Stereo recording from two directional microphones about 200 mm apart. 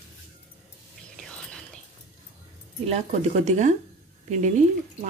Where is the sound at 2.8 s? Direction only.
35° right (ahead or behind).